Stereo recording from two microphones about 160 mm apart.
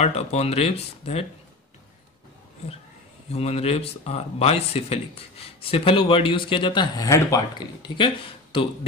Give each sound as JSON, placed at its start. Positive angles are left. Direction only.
{"t": 0.0, "sound": "speech", "side_deg": 40}
{"t": 3.3, "sound": "speech", "side_deg": 40}